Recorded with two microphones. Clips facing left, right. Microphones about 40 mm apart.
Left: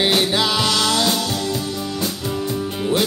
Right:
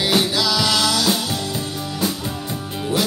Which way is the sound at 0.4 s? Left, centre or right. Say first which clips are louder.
Left 1 dB; left.